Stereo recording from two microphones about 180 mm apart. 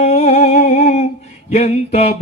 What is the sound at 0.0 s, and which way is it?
Music, 35° left (ahead or behind).